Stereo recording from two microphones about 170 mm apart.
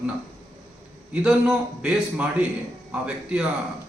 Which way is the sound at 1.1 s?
5° right (ahead or behind).